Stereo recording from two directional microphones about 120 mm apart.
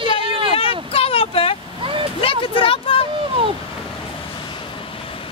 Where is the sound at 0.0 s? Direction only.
45° right (ahead or behind).